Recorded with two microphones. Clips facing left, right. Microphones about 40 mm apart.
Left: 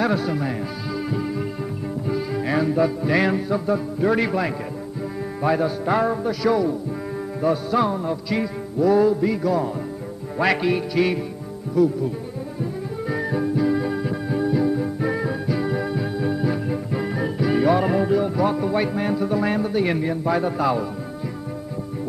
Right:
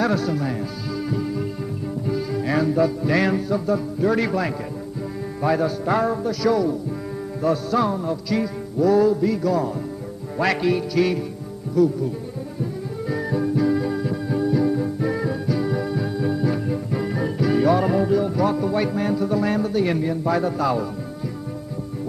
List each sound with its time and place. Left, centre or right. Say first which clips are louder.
0.0 s music: even; centre
13.1 s music: right 1 dB; centre